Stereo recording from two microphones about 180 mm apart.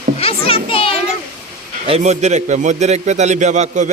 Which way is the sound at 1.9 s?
40° right (ahead or behind).